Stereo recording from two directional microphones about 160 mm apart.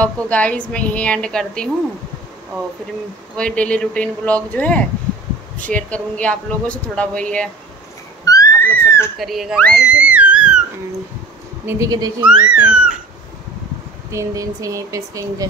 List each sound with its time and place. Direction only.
0.0 s speech: 10° left (ahead or behind)
3.3 s speech: 5° left (ahead or behind)
8.3 s a sound: 15° left (ahead or behind)
9.2 s speech: centre (ahead or behind)
9.8 s a sound: 5° right (ahead or behind)
11.6 s speech: 20° right (ahead or behind)
12.3 s speech: 5° right (ahead or behind)
14.1 s speech: 20° right (ahead or behind)